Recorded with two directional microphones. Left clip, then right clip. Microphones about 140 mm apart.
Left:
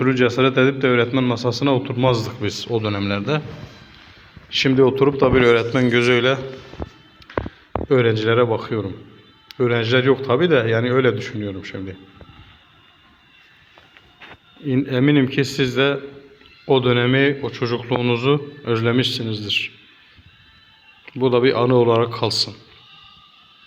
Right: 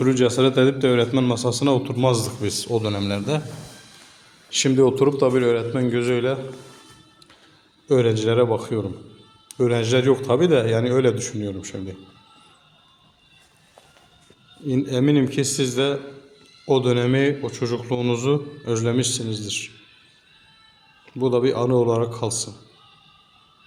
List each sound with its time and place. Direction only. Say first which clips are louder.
0.0 s a man's voice: left 1 dB; 20° right (ahead or behind)
4.4 s a man's voice: left 2 dB; 15° right (ahead or behind)
7.9 s a man's voice: left 2 dB; 10° right (ahead or behind)
14.7 s a man's voice: left 2 dB; 5° right (ahead or behind)
21.0 s a man's voice: left 4 dB; 10° right (ahead or behind)